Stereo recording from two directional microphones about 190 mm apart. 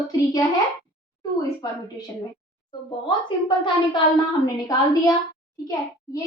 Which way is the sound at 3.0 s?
25° left (ahead or behind).